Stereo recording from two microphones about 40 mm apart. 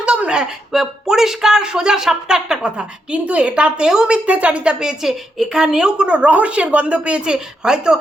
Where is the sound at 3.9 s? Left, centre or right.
Centre.